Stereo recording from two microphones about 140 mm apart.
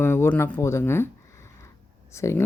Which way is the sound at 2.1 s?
20° left (ahead or behind).